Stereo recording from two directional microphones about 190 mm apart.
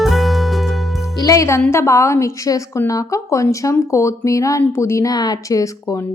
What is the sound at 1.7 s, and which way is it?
A woman's voice, 15° left (ahead or behind).